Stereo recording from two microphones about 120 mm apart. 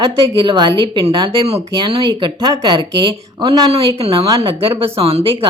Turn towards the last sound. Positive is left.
turn(degrees=-55)  # may be behind; listen again after turning